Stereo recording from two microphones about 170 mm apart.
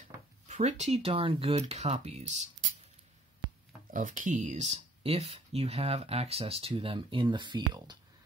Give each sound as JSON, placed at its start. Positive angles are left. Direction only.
{"t": 0.5, "sound": "speech", "side_deg": -40}
{"t": 3.9, "sound": "speech", "side_deg": -50}